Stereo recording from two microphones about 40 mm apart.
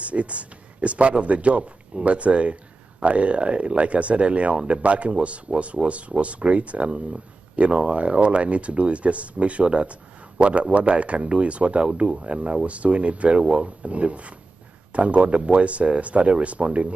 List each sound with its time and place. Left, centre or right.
0.0 s a man's voice: right